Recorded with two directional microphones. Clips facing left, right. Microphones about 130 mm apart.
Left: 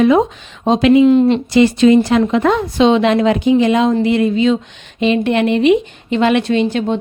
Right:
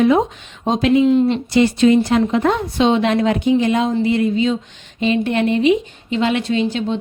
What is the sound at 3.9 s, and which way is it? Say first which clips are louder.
Speech: left 3 dB; 75° left (ahead or behind).